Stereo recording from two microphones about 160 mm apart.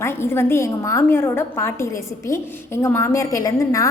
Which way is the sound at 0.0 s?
15° left (ahead or behind).